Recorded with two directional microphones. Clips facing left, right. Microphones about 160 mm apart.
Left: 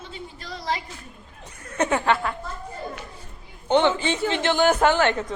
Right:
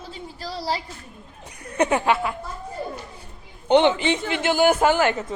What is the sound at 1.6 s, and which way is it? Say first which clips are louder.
Speech: right 2 dB; 15° right (ahead or behind).